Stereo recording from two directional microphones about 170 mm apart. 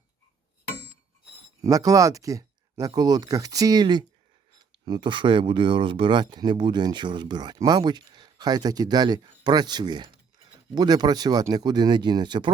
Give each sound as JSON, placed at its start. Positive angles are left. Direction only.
{"t": 1.6, "sound": "speech", "side_deg": -20}